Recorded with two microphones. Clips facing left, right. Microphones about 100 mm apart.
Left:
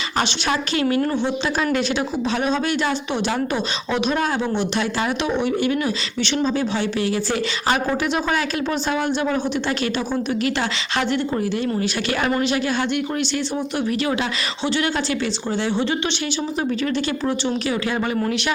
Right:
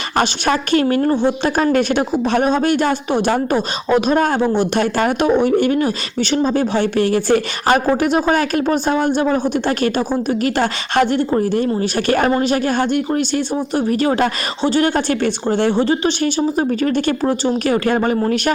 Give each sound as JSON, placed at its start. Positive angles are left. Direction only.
{"t": 0.2, "sound": "a woman's voice", "side_deg": -50}
{"t": 1.7, "sound": "speech", "side_deg": -50}